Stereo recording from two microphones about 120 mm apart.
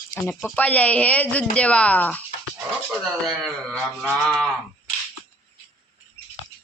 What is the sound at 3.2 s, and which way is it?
Speech, centre (ahead or behind).